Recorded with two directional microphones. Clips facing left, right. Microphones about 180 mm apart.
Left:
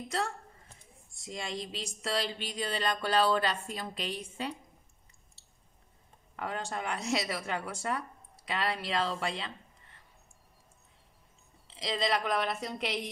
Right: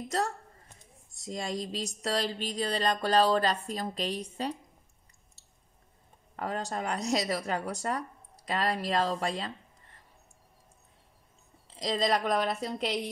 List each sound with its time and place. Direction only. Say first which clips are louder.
1.2 s speech: right 4 dB; 40° right (ahead or behind)
6.3 s speech: right 3 dB; 40° right (ahead or behind)
11.8 s speech: right 3 dB; 40° right (ahead or behind)